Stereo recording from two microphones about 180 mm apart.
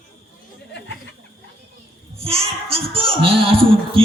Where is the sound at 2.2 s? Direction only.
35° right (ahead or behind).